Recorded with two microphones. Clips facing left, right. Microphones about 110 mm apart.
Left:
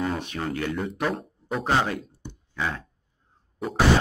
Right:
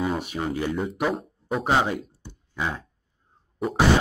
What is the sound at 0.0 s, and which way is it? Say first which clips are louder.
Speech: right 2 dB; 10° right (ahead or behind).